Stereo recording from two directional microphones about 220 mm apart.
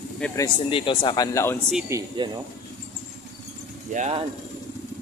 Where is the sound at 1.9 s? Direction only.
15° right (ahead or behind).